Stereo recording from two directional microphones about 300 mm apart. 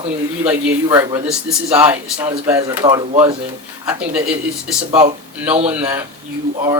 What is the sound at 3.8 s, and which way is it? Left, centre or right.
Speech, centre.